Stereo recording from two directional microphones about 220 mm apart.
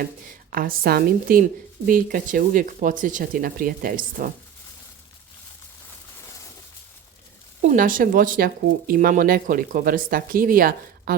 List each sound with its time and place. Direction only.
0.5 s speech: 40° right (ahead or behind)
7.6 s speech: 35° right (ahead or behind)